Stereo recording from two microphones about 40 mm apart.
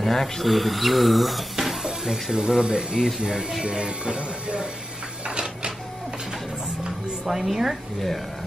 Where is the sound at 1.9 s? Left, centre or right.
Centre.